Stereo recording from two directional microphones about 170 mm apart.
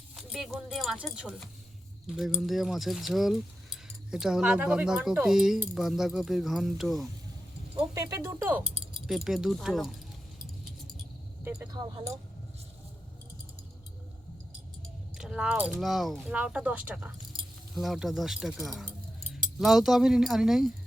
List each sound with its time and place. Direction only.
0.2 s speech: centre (ahead or behind)
7.9 s speech: 20° right (ahead or behind)
9.0 s speech: centre (ahead or behind)
15.1 s speech: 5° right (ahead or behind)